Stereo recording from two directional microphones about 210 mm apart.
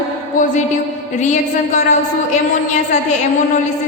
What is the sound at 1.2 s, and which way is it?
Speech, 35° left (ahead or behind).